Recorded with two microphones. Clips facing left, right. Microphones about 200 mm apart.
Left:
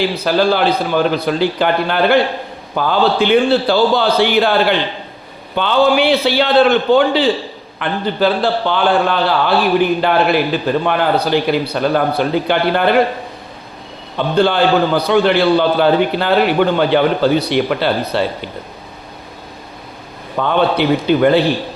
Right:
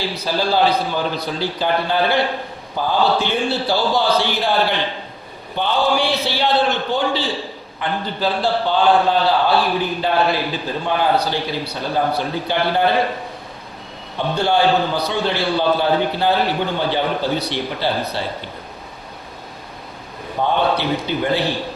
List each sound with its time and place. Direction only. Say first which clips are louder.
0.3 s a man's voice: left 3 dB; 65° left (ahead or behind)
5.5 s a man's voice: left 6 dB; 75° left (ahead or behind)
14.3 s a man's voice: left 4 dB; 80° left
20.3 s a man's voice: left 2 dB; 90° left
21.1 s a man's voice: left 10 dB; 75° left (ahead or behind)